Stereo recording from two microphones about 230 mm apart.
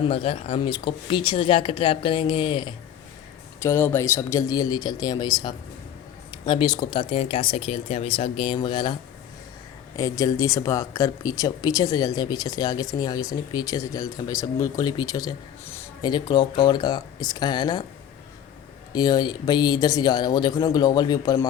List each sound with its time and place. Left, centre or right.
0.1 s speech: left
3.6 s speech: centre
18.9 s speech: centre